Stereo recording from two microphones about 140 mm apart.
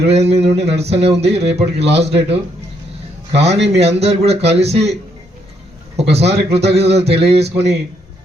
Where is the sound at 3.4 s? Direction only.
50° right (ahead or behind).